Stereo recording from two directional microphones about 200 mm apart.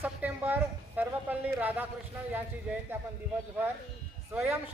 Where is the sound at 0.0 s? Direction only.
10° right (ahead or behind).